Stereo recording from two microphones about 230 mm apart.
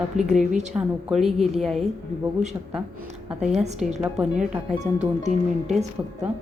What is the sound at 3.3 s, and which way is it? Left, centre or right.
Speech, centre.